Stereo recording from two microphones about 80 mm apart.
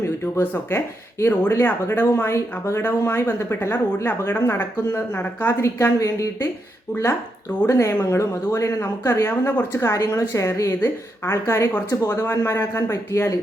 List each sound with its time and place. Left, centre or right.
0.0 s speech: left
5.5 s speech: left
12.2 s speech: left
12.9 s speech: left